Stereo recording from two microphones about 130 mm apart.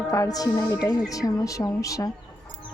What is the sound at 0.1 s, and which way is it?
Speech, 30° left (ahead or behind).